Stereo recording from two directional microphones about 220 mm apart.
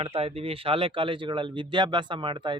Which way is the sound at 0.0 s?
25° right (ahead or behind).